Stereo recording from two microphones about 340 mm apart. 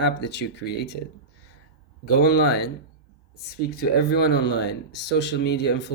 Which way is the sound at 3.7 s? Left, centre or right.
Left.